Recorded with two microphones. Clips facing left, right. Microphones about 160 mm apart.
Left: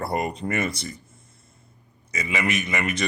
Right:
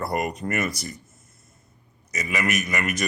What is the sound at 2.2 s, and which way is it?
Speech, 25° left (ahead or behind).